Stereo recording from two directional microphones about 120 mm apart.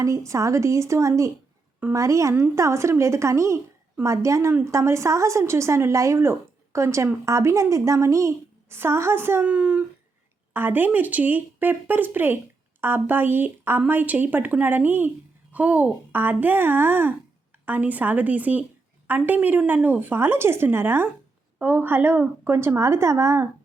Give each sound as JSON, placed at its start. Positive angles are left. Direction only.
{"t": 0.3, "sound": "a woman's voice", "side_deg": -25}